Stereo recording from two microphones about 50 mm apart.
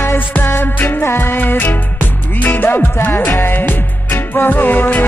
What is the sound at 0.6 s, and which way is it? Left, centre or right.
Music, left.